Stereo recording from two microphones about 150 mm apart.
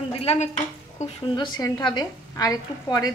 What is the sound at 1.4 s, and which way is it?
Speech, 25° left (ahead or behind).